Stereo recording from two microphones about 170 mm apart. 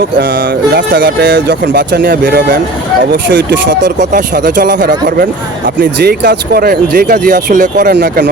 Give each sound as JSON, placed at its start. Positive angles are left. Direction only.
{"t": 0.2, "sound": "speech", "side_deg": -65}
{"t": 3.1, "sound": "speech", "side_deg": -90}
{"t": 3.8, "sound": "speech", "side_deg": -50}